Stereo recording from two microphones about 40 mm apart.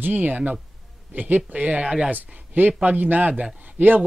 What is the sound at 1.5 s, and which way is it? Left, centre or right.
Speech, right.